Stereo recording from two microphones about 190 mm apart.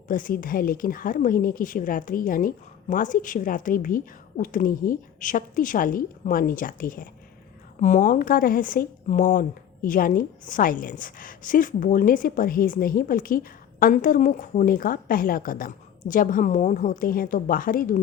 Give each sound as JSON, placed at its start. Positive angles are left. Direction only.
{"t": 0.1, "sound": "speech", "side_deg": 45}